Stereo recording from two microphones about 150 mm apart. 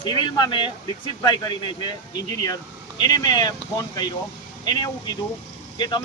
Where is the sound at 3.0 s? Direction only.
30° left (ahead or behind).